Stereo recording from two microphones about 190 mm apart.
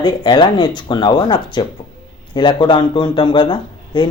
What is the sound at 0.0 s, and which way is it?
Speech, 25° left (ahead or behind).